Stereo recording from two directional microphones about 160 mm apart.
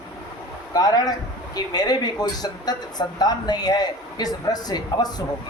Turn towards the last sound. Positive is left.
turn(degrees=25)  # may be behind; listen again after turning